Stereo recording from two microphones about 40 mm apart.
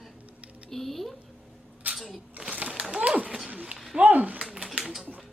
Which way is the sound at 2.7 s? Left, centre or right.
Right.